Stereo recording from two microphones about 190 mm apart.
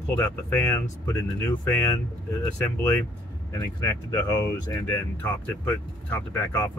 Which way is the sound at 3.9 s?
20° left (ahead or behind).